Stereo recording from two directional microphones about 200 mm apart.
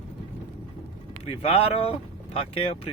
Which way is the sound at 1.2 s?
30° left (ahead or behind).